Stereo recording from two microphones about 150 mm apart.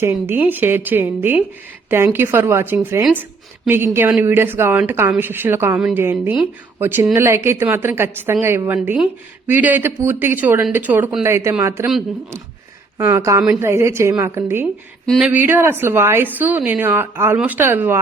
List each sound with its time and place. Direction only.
0.0 s speech: 15° right (ahead or behind)
13.0 s speech: 20° right (ahead or behind)
15.0 s speech: 5° left (ahead or behind)
15.3 s speech: 15° right (ahead or behind)